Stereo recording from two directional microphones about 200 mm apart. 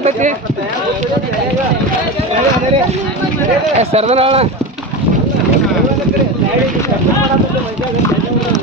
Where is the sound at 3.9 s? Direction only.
30° right (ahead or behind).